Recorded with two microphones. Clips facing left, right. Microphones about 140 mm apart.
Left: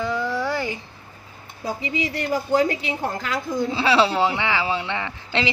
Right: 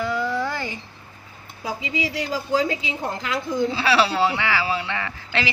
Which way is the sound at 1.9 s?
60° left (ahead or behind).